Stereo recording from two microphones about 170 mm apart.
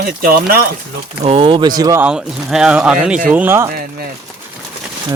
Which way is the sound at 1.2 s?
35° right (ahead or behind).